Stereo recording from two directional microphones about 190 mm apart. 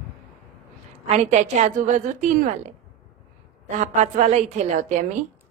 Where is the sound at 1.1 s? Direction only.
35° right (ahead or behind).